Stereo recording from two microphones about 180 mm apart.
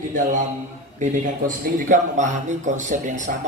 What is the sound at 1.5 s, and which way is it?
A man's voice, 45° right (ahead or behind).